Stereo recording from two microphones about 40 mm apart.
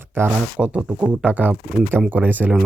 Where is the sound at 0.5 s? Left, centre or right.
Right.